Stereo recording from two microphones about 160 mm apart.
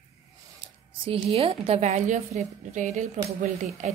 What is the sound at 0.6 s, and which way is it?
Speech, 35° right (ahead or behind).